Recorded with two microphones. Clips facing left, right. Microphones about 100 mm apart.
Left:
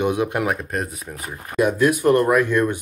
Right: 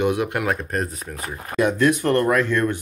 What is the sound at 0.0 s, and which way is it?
Speech, 20° left (ahead or behind).